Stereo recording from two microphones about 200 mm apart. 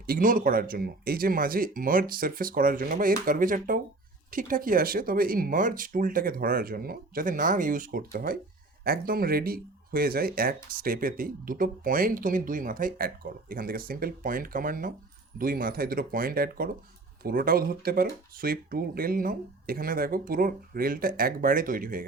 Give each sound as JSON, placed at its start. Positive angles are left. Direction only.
{"t": 0.0, "sound": "speech", "side_deg": -45}